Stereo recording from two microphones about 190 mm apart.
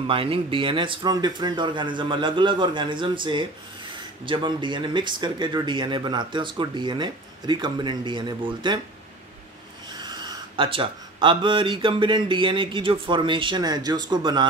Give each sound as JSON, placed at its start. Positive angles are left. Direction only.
{"t": 0.0, "sound": "speech", "side_deg": -30}
{"t": 9.8, "sound": "speech", "side_deg": -20}